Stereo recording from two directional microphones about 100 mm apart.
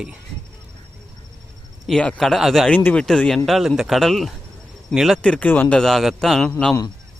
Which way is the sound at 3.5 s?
Centre (ahead or behind).